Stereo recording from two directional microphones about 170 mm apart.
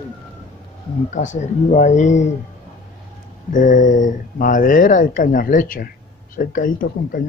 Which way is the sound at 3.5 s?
50° left (ahead or behind).